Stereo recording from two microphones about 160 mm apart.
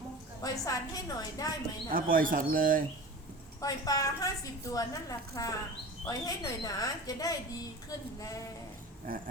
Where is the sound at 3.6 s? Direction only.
20° left (ahead or behind).